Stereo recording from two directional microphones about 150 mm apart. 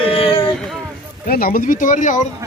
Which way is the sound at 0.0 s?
40° left (ahead or behind).